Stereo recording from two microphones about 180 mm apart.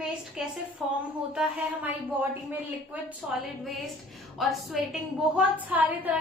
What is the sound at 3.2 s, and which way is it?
Speech, centre (ahead or behind).